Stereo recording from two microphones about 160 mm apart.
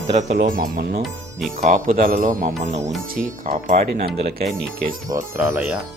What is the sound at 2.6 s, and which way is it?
Speech, 45° right (ahead or behind).